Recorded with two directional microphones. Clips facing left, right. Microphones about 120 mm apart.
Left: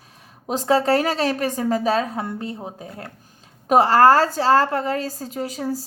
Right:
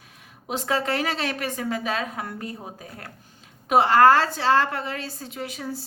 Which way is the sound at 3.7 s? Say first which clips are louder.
Left 2 dB; 40° left (ahead or behind).